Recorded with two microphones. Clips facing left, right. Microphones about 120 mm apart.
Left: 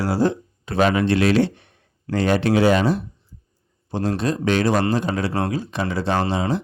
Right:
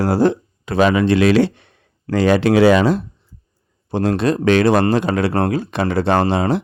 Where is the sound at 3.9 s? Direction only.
70° right (ahead or behind).